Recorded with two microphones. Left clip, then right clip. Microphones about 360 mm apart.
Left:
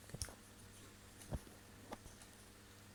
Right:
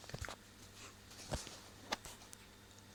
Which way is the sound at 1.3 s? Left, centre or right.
Right.